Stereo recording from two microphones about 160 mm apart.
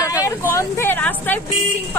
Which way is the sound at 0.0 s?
20° left (ahead or behind).